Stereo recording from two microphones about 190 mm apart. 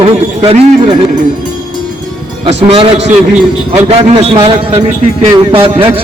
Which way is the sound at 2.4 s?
30° right (ahead or behind).